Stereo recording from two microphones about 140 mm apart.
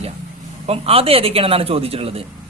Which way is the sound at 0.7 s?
45° right (ahead or behind).